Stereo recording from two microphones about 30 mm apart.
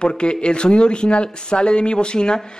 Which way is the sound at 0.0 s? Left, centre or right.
Left.